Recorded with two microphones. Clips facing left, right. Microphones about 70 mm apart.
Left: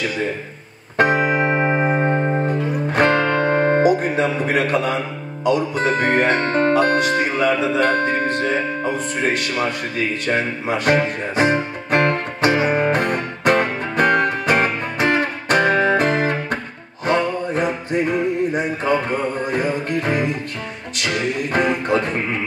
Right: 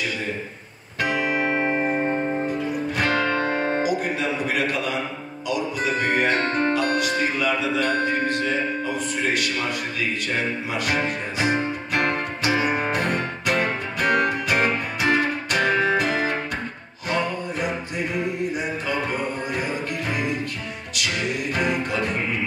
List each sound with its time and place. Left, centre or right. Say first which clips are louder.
0.9 s music: left 7 dB; left
5.4 s speech: left 7 dB; left
10.2 s music: left 5 dB; left